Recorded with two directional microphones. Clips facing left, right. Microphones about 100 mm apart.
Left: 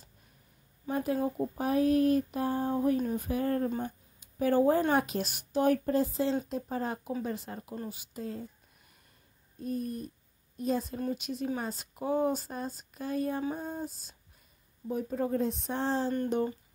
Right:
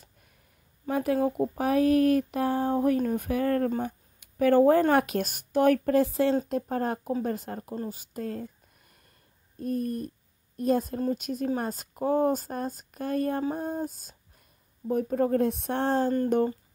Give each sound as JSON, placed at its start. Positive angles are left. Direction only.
{"t": 0.8, "sound": "speech", "side_deg": -65}
{"t": 3.8, "sound": "a sound", "side_deg": -65}
{"t": 4.9, "sound": "a woman's voice", "side_deg": -60}
{"t": 6.5, "sound": "a woman's voice", "side_deg": -55}
{"t": 9.6, "sound": "a woman's voice", "side_deg": -50}